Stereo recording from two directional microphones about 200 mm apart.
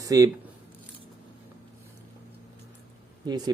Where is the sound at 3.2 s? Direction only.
20° right (ahead or behind).